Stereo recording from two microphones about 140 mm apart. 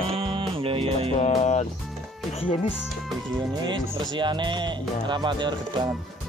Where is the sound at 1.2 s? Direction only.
55° left (ahead or behind).